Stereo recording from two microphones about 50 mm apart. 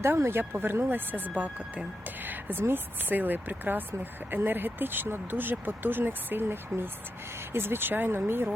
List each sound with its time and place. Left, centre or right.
0.0 s speech: right